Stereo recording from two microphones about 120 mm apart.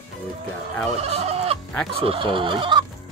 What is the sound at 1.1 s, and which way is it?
Fowl, 55° right (ahead or behind).